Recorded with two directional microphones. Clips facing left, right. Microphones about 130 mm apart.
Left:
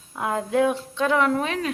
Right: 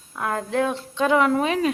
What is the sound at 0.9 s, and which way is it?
Speech, centre (ahead or behind).